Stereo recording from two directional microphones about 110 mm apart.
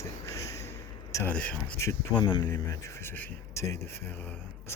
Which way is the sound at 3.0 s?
20° left (ahead or behind).